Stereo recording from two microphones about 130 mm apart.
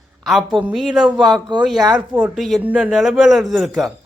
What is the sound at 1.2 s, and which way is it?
Speech, 35° right (ahead or behind).